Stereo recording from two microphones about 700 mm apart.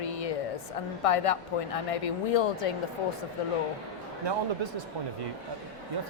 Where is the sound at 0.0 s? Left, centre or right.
Left.